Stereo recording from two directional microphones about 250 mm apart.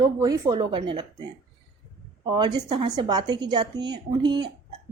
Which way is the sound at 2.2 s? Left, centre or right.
Centre.